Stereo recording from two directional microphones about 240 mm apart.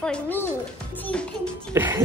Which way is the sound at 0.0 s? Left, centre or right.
Centre.